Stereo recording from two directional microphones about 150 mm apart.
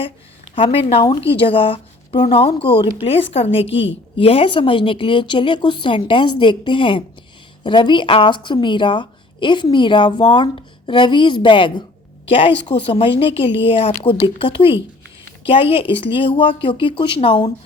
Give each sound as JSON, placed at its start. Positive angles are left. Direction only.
{"t": 0.5, "sound": "a woman's voice", "side_deg": 40}